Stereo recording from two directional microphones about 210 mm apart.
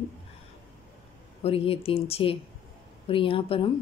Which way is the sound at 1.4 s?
25° left (ahead or behind).